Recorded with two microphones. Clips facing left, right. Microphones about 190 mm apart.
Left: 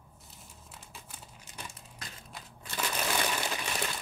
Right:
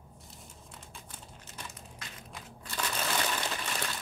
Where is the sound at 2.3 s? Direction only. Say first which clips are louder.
Right 1 dB; 10° left (ahead or behind).